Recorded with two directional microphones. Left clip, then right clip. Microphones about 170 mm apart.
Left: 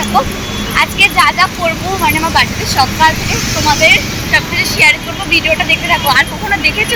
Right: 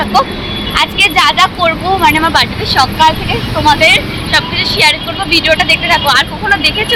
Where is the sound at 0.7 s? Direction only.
5° right (ahead or behind).